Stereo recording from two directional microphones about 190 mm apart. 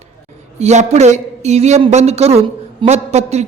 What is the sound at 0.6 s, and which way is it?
A woman's voice, 35° right (ahead or behind).